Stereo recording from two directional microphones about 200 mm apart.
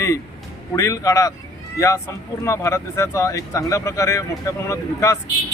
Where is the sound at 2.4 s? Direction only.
15° left (ahead or behind).